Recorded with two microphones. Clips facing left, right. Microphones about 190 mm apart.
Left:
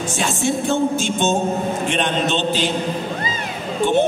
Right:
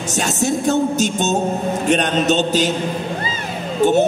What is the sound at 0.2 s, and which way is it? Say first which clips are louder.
A man's voice: right 2 dB; 40° right (ahead or behind).